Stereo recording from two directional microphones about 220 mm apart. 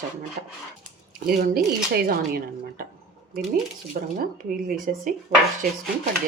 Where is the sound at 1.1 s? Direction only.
45° right (ahead or behind).